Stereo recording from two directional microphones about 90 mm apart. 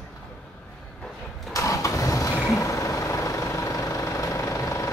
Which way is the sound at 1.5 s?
35° left (ahead or behind).